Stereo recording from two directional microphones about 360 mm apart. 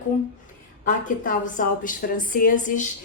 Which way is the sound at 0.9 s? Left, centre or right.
Left.